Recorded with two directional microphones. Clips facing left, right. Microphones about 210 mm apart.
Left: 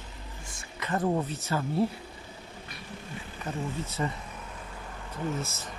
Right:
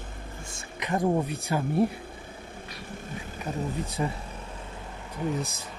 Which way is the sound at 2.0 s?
50° right (ahead or behind).